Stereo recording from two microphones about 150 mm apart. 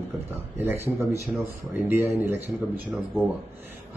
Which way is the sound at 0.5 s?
15° right (ahead or behind).